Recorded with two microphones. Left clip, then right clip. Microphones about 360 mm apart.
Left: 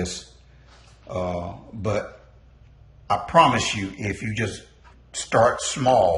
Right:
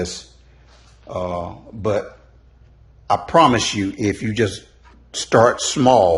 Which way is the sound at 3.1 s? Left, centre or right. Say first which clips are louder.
Right 3 dB; centre.